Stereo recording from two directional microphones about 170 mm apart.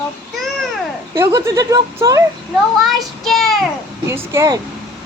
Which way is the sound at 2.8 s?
Centre (ahead or behind).